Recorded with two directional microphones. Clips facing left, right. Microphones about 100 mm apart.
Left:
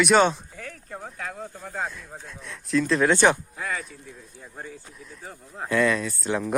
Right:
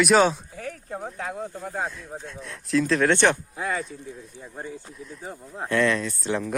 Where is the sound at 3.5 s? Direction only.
30° right (ahead or behind).